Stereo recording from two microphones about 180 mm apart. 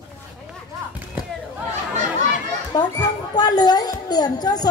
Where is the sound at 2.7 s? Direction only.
20° left (ahead or behind).